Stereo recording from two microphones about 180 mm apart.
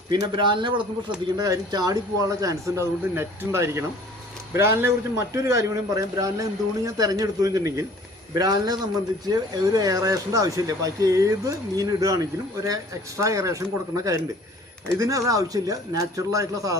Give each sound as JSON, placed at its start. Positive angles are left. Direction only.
{"t": 0.1, "sound": "a man's voice", "side_deg": -25}